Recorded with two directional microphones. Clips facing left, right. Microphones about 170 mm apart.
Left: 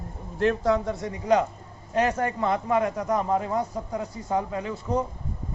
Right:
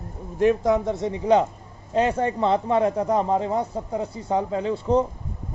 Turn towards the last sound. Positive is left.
turn(degrees=-30)  # may be behind; listen again after turning